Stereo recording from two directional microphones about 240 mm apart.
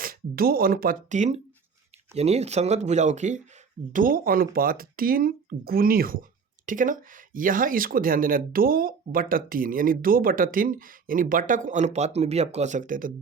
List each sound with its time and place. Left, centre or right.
0.0 s speech: right